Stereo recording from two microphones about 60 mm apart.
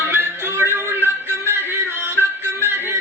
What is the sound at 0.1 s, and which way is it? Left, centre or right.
Music, right.